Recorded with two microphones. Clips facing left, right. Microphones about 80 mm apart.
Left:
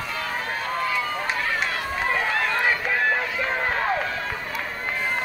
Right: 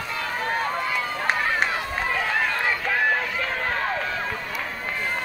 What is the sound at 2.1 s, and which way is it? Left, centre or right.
Run, centre.